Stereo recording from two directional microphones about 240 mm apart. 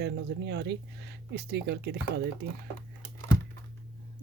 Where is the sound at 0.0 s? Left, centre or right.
Right.